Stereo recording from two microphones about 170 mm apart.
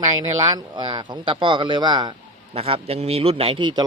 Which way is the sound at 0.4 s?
25° right (ahead or behind).